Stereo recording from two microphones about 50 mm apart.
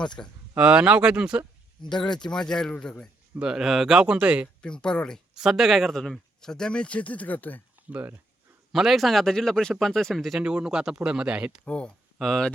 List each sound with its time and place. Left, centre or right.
0.2 s speech: left
0.6 s speech: centre
2.3 s a man's voice: centre
3.4 s speech: centre
4.6 s a man's voice: centre
5.3 s speech: centre
5.9 s speech: centre; by 7.6 s left
7.8 s speech: right
8.7 s a man's voice: centre
10.4 s speech: centre
11.6 s speech: left
12.2 s a man's voice: centre